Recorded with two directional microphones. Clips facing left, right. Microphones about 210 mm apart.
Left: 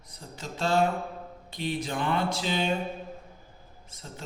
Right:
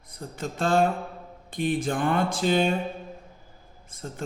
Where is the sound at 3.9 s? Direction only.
50° right (ahead or behind).